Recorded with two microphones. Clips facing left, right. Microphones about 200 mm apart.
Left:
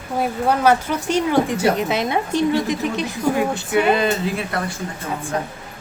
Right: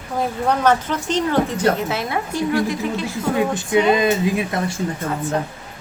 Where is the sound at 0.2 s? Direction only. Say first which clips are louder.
Left 1 dB; 10° left (ahead or behind).